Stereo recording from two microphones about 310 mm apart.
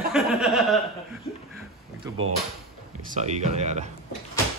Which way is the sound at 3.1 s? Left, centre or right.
Right.